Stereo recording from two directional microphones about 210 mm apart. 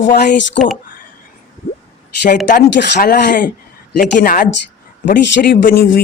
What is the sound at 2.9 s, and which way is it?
Speech, 40° left (ahead or behind).